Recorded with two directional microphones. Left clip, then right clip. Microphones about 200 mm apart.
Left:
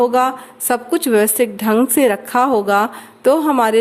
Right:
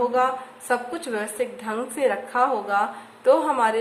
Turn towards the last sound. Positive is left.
turn(degrees=50)  # may be behind; listen again after turning